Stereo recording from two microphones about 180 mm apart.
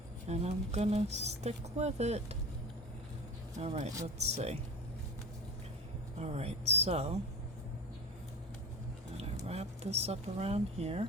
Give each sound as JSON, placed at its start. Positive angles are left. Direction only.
{"t": 0.3, "sound": "speech", "side_deg": -35}
{"t": 3.6, "sound": "speech", "side_deg": -40}
{"t": 6.1, "sound": "speech", "side_deg": -35}
{"t": 9.1, "sound": "speech", "side_deg": -35}